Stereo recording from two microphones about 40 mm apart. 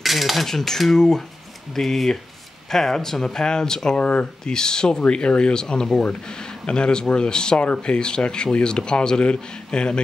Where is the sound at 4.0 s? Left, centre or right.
Left.